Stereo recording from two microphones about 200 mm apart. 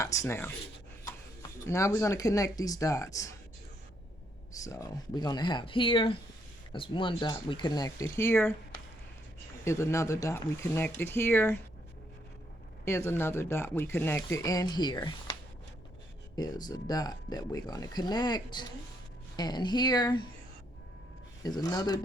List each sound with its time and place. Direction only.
0.0 s speech: 15° left (ahead or behind)
4.6 s speech: 15° left (ahead or behind)
9.6 s speech: 15° left (ahead or behind)
12.8 s speech: 15° left (ahead or behind)
16.3 s speech: 20° left (ahead or behind)
21.4 s speech: 20° left (ahead or behind)